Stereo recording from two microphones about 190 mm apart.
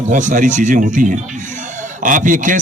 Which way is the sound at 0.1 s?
40° right (ahead or behind).